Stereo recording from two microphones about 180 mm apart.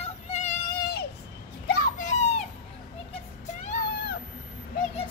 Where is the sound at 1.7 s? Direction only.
45° left (ahead or behind).